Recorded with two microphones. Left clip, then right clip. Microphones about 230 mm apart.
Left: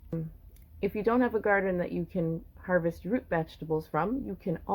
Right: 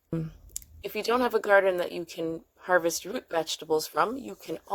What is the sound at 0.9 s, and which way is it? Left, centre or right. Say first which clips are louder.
Speech: right 3 dB; right.